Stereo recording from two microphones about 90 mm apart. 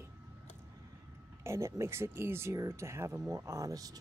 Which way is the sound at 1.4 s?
30° right (ahead or behind).